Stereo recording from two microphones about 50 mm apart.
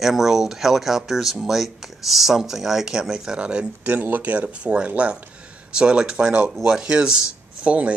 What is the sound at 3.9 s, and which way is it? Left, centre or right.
Speech, right.